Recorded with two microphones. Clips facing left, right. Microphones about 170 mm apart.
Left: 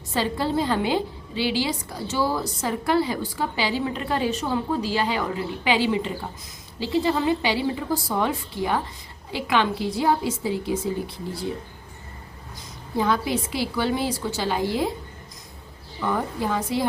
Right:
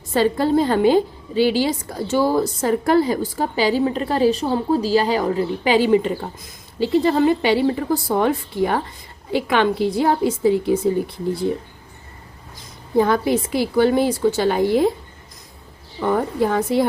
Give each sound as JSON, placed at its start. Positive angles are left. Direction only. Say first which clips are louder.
{"t": 0.1, "sound": "a woman's voice", "louder": "right 7 dB", "side_deg": -50}
{"t": 13.0, "sound": "a woman's voice", "louder": "right 6 dB", "side_deg": -50}
{"t": 16.0, "sound": "a woman's voice", "louder": "right 7 dB", "side_deg": -50}